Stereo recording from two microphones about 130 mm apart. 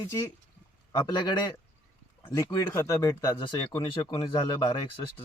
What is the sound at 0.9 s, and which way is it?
Speech, 30° left (ahead or behind).